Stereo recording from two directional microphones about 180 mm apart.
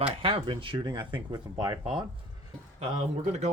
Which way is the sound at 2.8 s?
40° right (ahead or behind).